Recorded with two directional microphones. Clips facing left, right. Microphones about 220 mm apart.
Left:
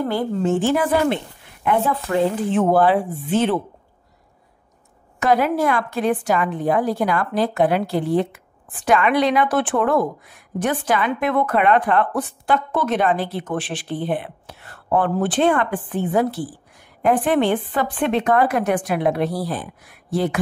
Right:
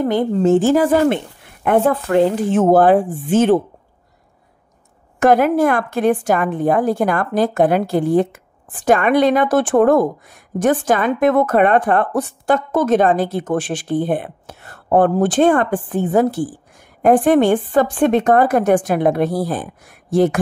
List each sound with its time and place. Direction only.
0.0 s a woman's voice: 20° right (ahead or behind)
0.3 s a woman's voice: 40° right (ahead or behind)
5.2 s a woman's voice: 50° right (ahead or behind)